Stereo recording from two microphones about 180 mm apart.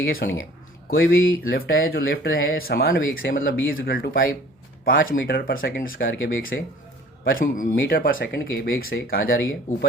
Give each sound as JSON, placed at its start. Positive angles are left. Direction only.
{"t": 0.0, "sound": "speech", "side_deg": 55}
{"t": 5.0, "sound": "speech", "side_deg": 90}
{"t": 5.5, "sound": "speech", "side_deg": 55}